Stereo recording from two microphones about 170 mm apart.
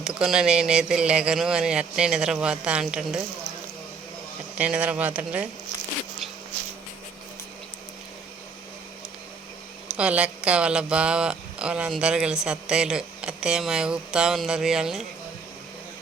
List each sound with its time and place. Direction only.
0.0 s speech: 5° right (ahead or behind)
4.5 s speech: 5° right (ahead or behind)
9.9 s speech: 5° right (ahead or behind)